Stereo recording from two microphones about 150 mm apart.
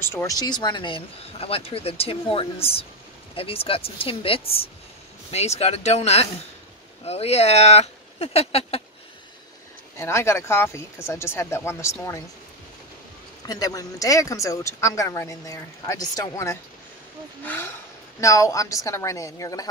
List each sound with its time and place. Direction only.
0.0 s speech: 15° left (ahead or behind); by 8.8 s 40° left (ahead or behind)
9.9 s speech: 20° left (ahead or behind)
13.5 s speech: 25° left (ahead or behind)